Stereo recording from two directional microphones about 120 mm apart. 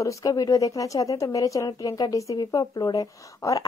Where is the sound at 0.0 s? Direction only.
30° left (ahead or behind).